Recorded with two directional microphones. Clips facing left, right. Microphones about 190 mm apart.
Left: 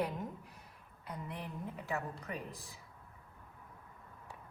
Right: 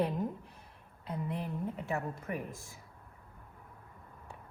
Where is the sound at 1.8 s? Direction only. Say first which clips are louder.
Right 3 dB; 25° right (ahead or behind).